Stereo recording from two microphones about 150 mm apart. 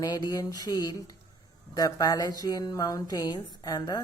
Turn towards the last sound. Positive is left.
turn(degrees=25)  # may be behind; listen again after turning